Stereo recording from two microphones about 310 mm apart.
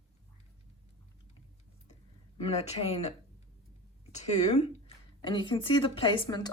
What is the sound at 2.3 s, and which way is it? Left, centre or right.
Speech, centre.